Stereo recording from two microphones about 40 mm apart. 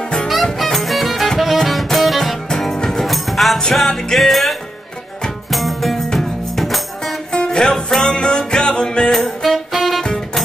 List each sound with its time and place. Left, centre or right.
0.6 s music: centre
7.3 s music: centre
9.1 s music: centre